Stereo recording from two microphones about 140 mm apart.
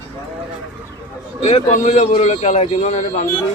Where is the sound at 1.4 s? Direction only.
45° left (ahead or behind).